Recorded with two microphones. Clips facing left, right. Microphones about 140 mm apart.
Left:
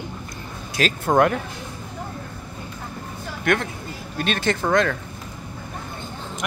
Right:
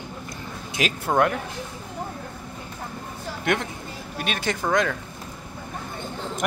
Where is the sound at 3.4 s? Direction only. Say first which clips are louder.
Left 3 dB; 20° right (ahead or behind).